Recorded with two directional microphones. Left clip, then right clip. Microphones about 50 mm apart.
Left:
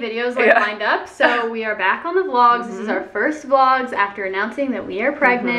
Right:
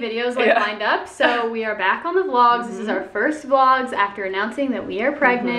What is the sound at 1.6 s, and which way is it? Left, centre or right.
A woman's voice, centre.